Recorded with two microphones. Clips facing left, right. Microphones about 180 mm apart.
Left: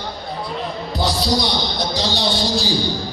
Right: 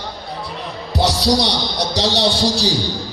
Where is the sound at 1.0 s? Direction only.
75° right (ahead or behind).